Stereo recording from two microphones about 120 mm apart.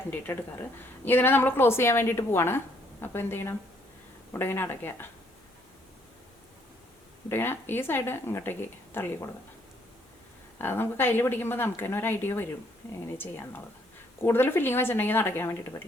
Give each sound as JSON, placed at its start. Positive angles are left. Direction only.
{"t": 0.3, "sound": "speech", "side_deg": 20}
{"t": 7.3, "sound": "speech", "side_deg": 20}
{"t": 10.6, "sound": "speech", "side_deg": 20}